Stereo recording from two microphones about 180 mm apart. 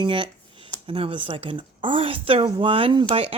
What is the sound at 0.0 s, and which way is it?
Speech, 30° right (ahead or behind).